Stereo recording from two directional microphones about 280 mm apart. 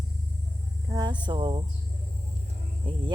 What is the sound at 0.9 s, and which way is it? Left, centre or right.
Speech, centre.